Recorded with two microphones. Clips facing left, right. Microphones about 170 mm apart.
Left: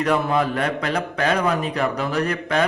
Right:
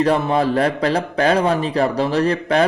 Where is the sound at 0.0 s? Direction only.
30° right (ahead or behind).